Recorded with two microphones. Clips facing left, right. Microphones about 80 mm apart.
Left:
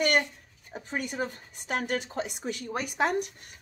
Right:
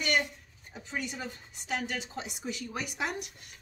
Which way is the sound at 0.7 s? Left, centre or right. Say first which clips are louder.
Left 5 dB; left.